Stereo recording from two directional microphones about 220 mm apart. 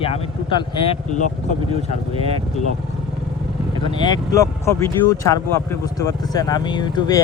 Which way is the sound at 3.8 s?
20° left (ahead or behind).